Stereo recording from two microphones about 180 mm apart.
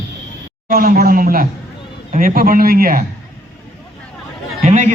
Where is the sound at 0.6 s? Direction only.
55° right (ahead or behind).